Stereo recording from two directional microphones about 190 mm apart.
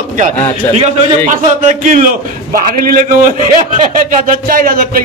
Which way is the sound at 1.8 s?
45° right (ahead or behind).